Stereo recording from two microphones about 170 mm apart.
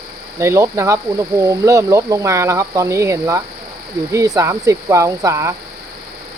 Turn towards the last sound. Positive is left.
turn(degrees=-20)  # may be behind; listen again after turning